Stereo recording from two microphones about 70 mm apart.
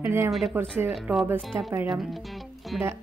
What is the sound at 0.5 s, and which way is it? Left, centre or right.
Speech, right.